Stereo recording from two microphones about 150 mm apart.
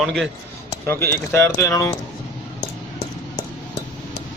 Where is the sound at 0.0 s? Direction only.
Centre (ahead or behind).